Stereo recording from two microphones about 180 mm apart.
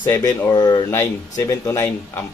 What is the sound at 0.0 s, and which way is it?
Speech, 15° left (ahead or behind).